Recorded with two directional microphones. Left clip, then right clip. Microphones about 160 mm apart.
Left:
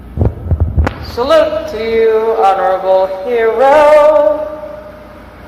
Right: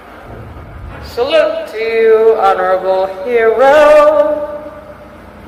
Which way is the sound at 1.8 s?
35° right (ahead or behind).